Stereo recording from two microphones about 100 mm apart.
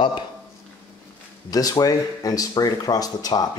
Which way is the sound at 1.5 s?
40° left (ahead or behind).